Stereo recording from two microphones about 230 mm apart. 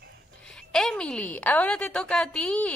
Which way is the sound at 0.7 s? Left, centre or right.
Centre.